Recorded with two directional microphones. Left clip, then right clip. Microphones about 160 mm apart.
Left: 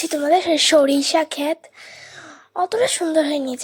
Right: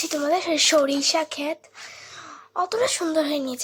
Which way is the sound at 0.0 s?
15° left (ahead or behind).